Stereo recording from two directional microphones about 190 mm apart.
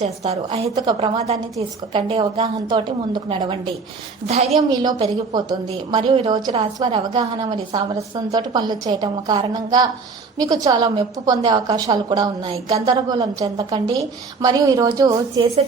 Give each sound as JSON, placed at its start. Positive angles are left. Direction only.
{"t": 0.0, "sound": "a woman's voice", "side_deg": -35}
{"t": 4.5, "sound": "a woman's voice", "side_deg": -20}